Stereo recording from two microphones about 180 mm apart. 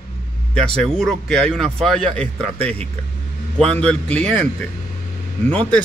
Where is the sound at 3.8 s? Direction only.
5° left (ahead or behind).